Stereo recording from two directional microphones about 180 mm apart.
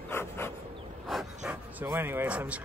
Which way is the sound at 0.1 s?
15° left (ahead or behind).